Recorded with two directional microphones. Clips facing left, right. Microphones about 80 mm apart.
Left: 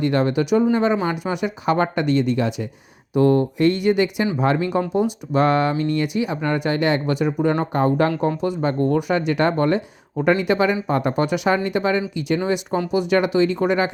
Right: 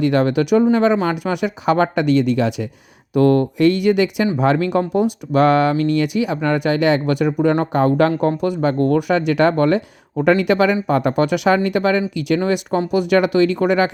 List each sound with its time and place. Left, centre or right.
0.0 s speech: right
3.2 s speech: right
4.4 s speech: right
8.4 s speech: right
12.5 s speech: right